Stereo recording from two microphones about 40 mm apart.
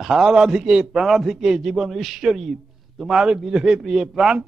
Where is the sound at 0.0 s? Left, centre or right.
Centre.